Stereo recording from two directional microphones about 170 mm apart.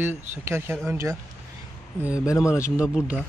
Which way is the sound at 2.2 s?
20° left (ahead or behind).